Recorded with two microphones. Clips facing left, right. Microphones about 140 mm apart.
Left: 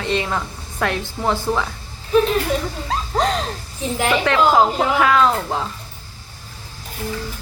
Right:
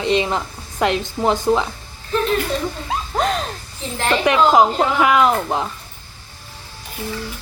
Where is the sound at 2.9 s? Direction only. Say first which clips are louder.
Left 1 dB; 5° right (ahead or behind).